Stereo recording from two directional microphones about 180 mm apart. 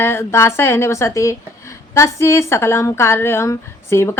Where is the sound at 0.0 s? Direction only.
15° left (ahead or behind).